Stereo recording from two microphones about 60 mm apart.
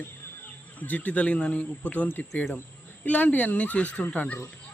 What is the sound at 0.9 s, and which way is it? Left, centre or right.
Speech, left.